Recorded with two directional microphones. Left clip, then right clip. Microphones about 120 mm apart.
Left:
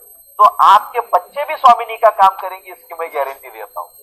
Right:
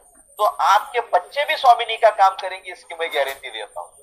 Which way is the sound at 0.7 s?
20° right (ahead or behind).